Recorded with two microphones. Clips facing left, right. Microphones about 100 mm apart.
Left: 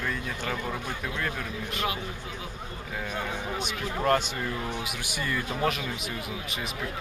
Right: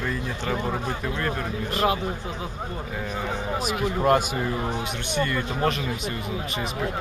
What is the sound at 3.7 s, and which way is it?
Speech, 15° right (ahead or behind).